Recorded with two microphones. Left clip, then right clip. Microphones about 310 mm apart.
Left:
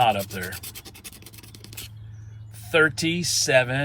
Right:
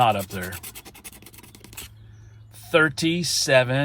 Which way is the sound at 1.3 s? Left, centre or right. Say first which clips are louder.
Left 1 dB; centre.